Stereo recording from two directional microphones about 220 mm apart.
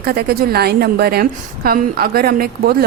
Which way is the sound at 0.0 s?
45° right (ahead or behind).